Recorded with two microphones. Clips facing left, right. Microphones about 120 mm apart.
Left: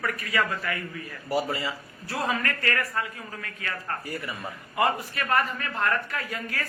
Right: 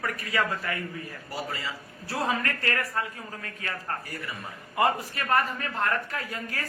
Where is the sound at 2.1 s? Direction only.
30° right (ahead or behind).